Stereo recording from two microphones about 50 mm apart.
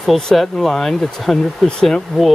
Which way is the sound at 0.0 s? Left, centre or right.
Centre.